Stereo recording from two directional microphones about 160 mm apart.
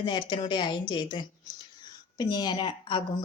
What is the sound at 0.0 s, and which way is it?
A woman's voice, 30° left (ahead or behind).